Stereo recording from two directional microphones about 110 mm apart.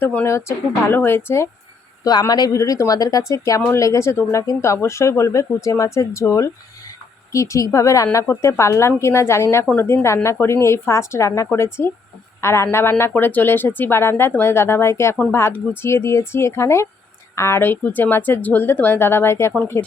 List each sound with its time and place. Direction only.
0.0 s speech: 15° left (ahead or behind)
2.0 s speech: 35° left (ahead or behind)